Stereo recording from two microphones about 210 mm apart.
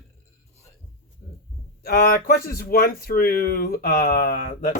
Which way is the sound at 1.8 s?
45° left (ahead or behind).